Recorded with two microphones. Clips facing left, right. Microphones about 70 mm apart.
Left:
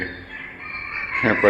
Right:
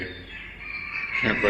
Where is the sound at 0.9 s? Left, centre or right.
Left.